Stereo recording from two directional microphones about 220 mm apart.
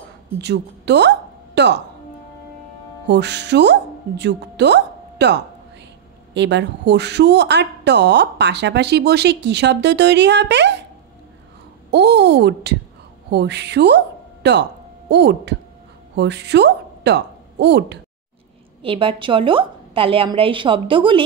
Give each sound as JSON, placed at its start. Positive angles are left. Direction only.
{"t": 0.4, "sound": "a woman's voice", "side_deg": -50}
{"t": 3.1, "sound": "a woman's voice", "side_deg": -50}
{"t": 11.9, "sound": "a woman's voice", "side_deg": -50}
{"t": 18.8, "sound": "a woman's voice", "side_deg": -25}